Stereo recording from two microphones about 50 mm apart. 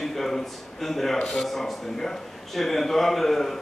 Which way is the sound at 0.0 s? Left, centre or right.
Centre.